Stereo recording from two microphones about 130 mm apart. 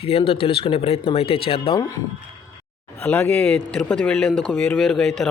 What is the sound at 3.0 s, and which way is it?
A man's voice, 15° left (ahead or behind).